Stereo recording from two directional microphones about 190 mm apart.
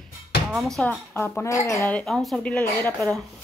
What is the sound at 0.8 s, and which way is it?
Speech, 10° left (ahead or behind).